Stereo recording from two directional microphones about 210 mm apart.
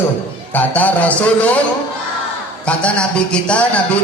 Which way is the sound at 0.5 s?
10° left (ahead or behind).